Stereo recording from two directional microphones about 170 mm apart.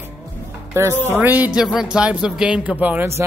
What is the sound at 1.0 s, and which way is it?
A man's voice, 10° right (ahead or behind).